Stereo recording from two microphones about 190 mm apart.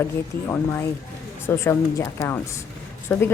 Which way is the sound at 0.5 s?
15° left (ahead or behind).